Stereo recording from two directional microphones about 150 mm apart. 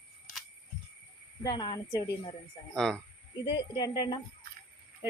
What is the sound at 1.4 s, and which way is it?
Speech, 30° left (ahead or behind).